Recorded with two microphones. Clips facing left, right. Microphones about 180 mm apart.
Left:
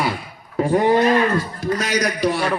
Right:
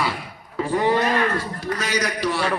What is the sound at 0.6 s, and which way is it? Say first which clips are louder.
Speech: left 5 dB; 45° left (ahead or behind).